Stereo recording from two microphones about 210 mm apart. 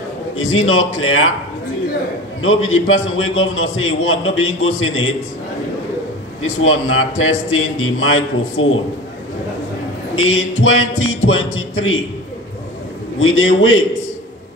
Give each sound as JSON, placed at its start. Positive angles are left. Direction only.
{"t": 0.4, "sound": "a man's voice", "side_deg": 70}
{"t": 2.4, "sound": "a man's voice", "side_deg": 70}
{"t": 6.4, "sound": "a man's voice", "side_deg": 75}
{"t": 10.1, "sound": "a sound", "side_deg": 70}
{"t": 10.6, "sound": "a man's voice", "side_deg": 70}
{"t": 13.2, "sound": "a man's voice", "side_deg": 70}